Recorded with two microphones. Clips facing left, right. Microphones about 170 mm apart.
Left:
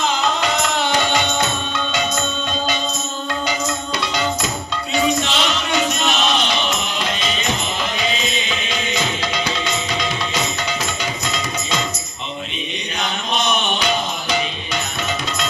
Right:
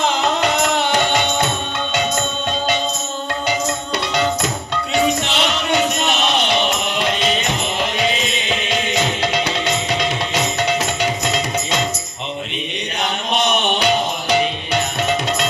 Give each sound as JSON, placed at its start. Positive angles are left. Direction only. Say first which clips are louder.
{"t": 0.2, "sound": "music", "louder": "right 2 dB", "side_deg": -60}
{"t": 4.0, "sound": "music", "louder": "right 4 dB", "side_deg": -60}
{"t": 13.0, "sound": "music", "louder": "right 3 dB", "side_deg": -65}